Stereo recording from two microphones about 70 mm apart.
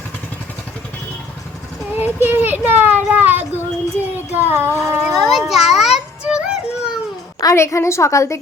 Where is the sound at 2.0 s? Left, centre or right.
Right.